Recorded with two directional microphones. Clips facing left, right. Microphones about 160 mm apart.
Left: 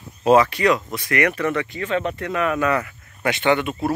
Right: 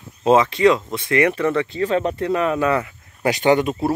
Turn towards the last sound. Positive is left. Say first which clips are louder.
# right 3 dB
turn(degrees=-40)  # may be behind; listen again after turning